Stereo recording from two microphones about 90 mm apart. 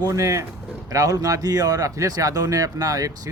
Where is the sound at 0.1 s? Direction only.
35° right (ahead or behind).